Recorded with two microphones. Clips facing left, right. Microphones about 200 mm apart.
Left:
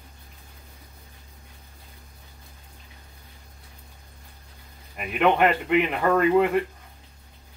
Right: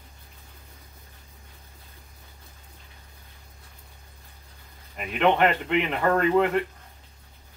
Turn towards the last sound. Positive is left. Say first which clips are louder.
# left 2 dB
turn(degrees=10)  # may be behind; listen again after turning